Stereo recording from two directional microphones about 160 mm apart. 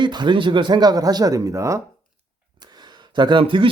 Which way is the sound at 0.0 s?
30° right (ahead or behind).